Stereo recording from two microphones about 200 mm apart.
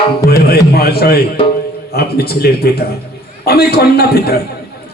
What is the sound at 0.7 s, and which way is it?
A man's voice, 50° left (ahead or behind).